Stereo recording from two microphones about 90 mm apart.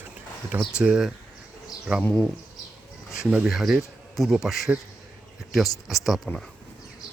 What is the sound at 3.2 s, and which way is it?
Speech, 15° right (ahead or behind).